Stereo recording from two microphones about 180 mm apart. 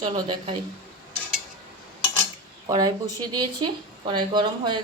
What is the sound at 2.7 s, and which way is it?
Speech, 20° right (ahead or behind).